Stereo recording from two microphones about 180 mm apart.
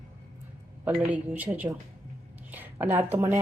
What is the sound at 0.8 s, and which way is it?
Speech, 10° right (ahead or behind).